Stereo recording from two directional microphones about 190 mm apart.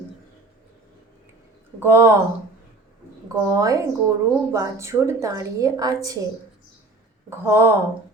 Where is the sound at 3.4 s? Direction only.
15° right (ahead or behind).